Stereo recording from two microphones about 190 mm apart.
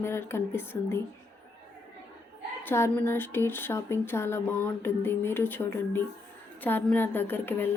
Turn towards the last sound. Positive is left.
turn(degrees=10)  # may be behind; listen again after turning